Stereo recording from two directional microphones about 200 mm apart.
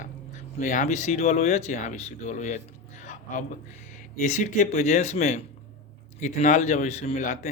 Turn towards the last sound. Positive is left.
turn(degrees=40)  # may be behind; listen again after turning